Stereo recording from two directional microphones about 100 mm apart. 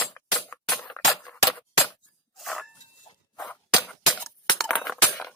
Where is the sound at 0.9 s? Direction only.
20° left (ahead or behind).